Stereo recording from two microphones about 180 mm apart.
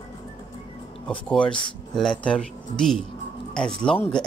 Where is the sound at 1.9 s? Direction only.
5° left (ahead or behind).